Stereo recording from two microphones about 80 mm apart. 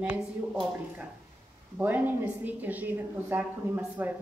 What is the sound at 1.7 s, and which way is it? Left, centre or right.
Speech, right.